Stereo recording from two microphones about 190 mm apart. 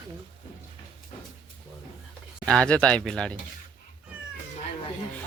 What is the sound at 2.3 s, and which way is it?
Speech, 5° left (ahead or behind).